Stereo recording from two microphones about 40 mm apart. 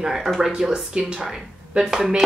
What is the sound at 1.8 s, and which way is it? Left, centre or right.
Speech, centre.